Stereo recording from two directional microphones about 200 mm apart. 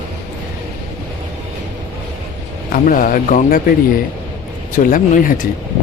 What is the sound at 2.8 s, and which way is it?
Speech, 45° left (ahead or behind).